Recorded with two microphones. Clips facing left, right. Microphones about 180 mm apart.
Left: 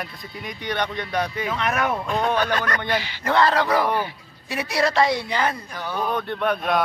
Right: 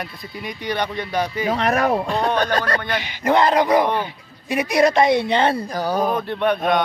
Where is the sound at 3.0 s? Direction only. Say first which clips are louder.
Right 4 dB; 15° right (ahead or behind); by 6.1 s 40° right (ahead or behind).